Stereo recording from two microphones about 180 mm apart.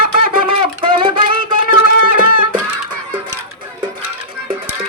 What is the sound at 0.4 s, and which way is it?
Music, 30° right (ahead or behind).